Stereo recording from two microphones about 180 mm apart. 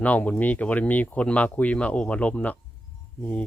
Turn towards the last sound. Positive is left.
turn(degrees=10)  # may be behind; listen again after turning